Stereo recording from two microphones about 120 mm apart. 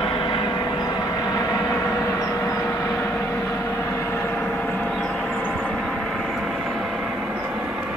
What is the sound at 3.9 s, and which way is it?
Vehicle, 20° left (ahead or behind).